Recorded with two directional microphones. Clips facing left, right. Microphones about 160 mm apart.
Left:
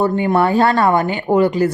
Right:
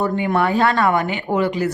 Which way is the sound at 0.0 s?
30° left (ahead or behind).